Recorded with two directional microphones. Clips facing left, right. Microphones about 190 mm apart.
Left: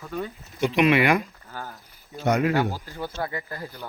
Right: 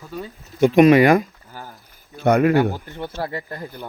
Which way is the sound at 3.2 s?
30° right (ahead or behind).